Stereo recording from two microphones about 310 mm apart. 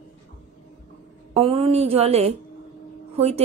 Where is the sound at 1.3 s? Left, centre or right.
Centre.